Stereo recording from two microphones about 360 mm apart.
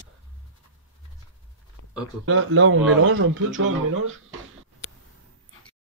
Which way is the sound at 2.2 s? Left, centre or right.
Right.